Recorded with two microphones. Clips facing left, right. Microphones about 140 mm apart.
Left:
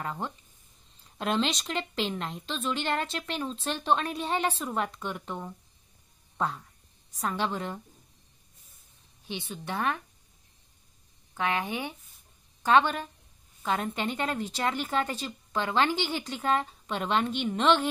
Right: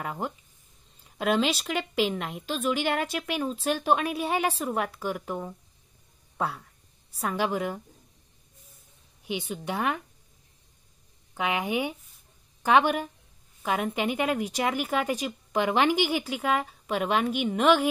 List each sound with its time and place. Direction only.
0.0 s a woman's voice: 10° right (ahead or behind)
9.2 s a woman's voice: 15° right (ahead or behind)
11.3 s a woman's voice: 15° right (ahead or behind)